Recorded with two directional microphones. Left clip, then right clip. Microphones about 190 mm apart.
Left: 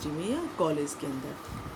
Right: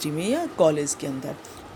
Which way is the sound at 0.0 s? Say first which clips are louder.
Right 7 dB; 45° right (ahead or behind).